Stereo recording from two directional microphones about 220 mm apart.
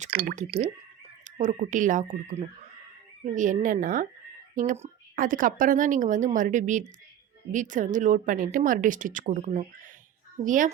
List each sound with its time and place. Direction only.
0.0 s a woman's voice: 40° right (ahead or behind)